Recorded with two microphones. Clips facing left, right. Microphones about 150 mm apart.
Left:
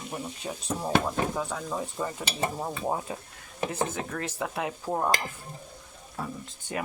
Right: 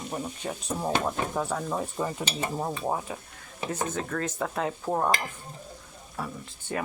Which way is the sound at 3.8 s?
15° left (ahead or behind).